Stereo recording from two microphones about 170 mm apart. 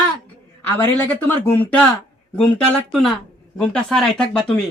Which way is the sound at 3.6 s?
5° left (ahead or behind).